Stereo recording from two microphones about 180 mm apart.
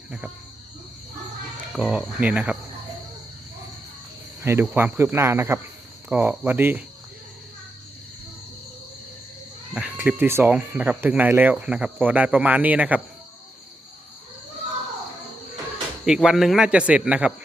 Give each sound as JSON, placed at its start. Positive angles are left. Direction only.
{"t": 1.7, "sound": "speech", "side_deg": -5}
{"t": 4.4, "sound": "speech", "side_deg": -15}
{"t": 9.7, "sound": "speech", "side_deg": -5}
{"t": 16.0, "sound": "speech", "side_deg": -5}